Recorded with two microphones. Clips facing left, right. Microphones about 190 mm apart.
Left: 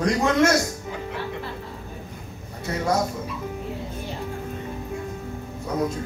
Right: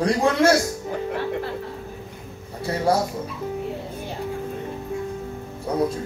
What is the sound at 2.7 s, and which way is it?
Speech, 30° right (ahead or behind).